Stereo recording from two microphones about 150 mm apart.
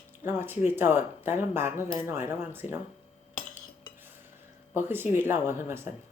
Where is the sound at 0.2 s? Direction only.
15° right (ahead or behind).